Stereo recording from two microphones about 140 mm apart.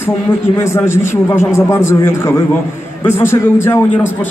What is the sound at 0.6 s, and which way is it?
A man's voice, 20° left (ahead or behind).